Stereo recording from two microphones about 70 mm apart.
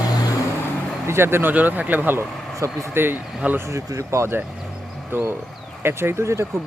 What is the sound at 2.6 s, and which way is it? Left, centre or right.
Speech, right.